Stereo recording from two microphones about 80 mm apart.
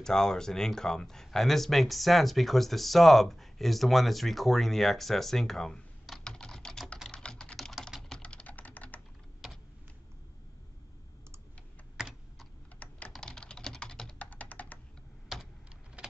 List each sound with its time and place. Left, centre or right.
0.0 s speech: centre
7.1 s typing: centre
9.4 s computer keyboard: centre
12.0 s computer keyboard: centre
12.7 s typing: centre
13.1 s typing: centre
15.3 s computer keyboard: centre
16.0 s vehicle: centre